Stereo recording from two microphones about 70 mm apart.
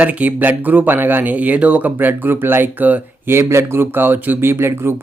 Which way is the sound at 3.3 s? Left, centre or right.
Right.